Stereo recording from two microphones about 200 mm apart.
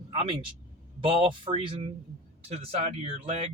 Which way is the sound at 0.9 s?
25° right (ahead or behind).